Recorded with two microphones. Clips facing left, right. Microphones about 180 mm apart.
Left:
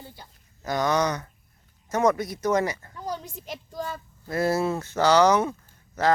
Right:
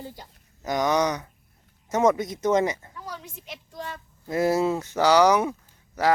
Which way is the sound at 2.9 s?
30° left (ahead or behind).